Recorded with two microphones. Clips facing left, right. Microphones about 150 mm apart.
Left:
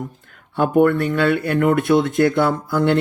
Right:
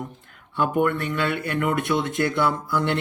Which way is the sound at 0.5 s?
45° left (ahead or behind).